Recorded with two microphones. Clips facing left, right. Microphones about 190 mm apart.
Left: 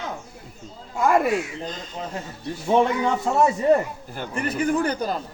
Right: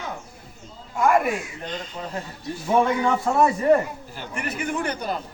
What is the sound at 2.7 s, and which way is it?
Speech, 20° left (ahead or behind).